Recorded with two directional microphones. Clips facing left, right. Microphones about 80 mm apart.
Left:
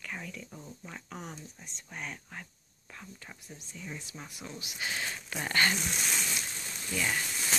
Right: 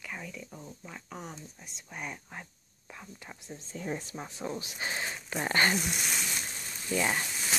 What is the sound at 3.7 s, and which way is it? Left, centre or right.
Speech, right.